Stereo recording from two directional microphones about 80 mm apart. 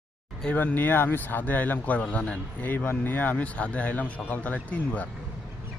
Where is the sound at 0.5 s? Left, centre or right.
Left.